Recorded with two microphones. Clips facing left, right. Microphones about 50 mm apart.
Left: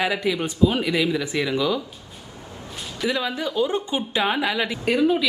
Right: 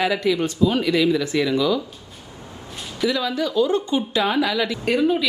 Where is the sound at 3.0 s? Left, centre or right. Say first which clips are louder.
Right 3 dB; left.